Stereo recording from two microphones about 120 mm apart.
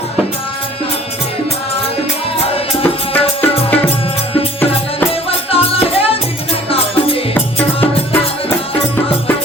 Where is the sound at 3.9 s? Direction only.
55° left (ahead or behind).